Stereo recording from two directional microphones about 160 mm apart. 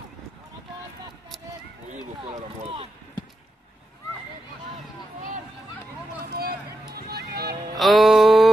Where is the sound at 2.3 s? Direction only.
35° right (ahead or behind).